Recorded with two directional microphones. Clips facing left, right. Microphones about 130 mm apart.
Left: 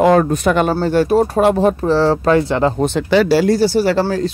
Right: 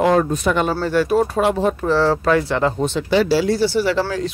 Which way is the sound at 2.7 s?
50° left (ahead or behind).